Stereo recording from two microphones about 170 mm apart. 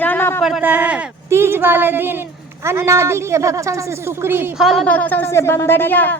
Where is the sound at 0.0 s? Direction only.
10° left (ahead or behind).